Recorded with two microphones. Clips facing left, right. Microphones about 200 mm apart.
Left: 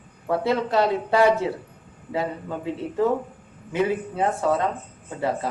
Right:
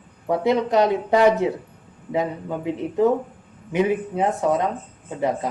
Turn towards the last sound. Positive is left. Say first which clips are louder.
# right 2 dB
turn(degrees=-15)  # may be behind; listen again after turning